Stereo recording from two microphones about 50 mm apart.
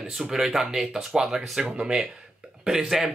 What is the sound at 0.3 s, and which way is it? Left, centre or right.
Speech, centre.